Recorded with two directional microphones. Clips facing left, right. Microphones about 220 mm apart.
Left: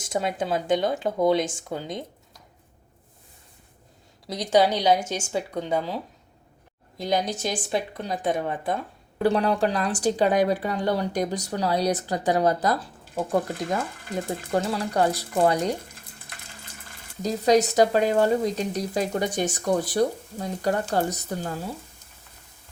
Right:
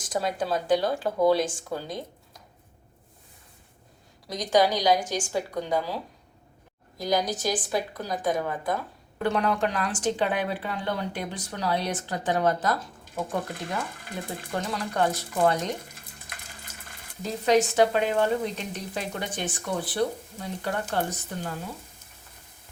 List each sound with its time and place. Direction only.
0.0 s a woman's voice: 25° left (ahead or behind)
4.4 s a woman's voice: 25° left (ahead or behind)
17.2 s speech: 40° left (ahead or behind)